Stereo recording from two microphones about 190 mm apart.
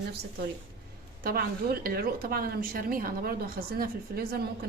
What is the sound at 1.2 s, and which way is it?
Speech, 50° right (ahead or behind).